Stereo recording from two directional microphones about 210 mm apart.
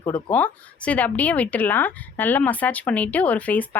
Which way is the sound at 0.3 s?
5° left (ahead or behind).